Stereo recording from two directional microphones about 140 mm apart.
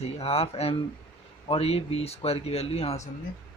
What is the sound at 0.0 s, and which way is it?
Speech, 45° left (ahead or behind).